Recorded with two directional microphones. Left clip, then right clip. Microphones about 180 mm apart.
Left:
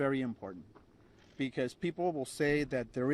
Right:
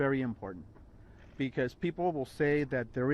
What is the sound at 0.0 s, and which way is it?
Speech, 60° left (ahead or behind).